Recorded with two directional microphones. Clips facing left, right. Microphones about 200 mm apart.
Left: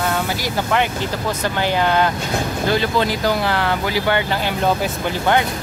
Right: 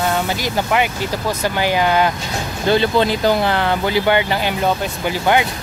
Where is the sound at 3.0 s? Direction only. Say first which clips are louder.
Right 3 dB; 25° right (ahead or behind).